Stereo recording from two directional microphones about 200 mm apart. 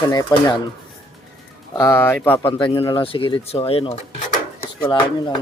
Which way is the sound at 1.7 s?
15° left (ahead or behind).